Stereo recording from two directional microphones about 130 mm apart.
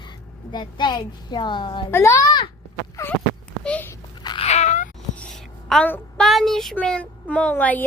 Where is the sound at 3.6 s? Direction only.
10° left (ahead or behind).